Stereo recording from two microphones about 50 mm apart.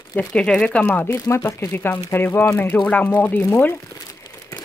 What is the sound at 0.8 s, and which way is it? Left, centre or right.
Speech, left.